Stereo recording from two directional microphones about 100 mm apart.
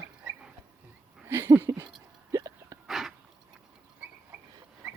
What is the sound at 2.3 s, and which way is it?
Hiccup, 35° right (ahead or behind).